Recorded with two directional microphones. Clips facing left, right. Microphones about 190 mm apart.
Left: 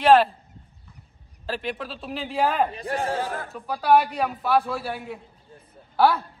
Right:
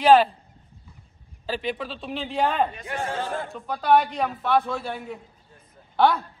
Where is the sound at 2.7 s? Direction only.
35° left (ahead or behind).